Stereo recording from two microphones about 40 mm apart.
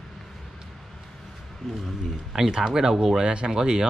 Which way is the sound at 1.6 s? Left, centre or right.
Centre.